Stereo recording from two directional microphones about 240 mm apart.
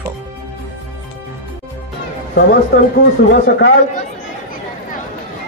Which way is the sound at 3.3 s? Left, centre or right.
Left.